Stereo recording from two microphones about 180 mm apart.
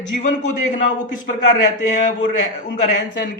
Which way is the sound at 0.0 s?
40° left (ahead or behind).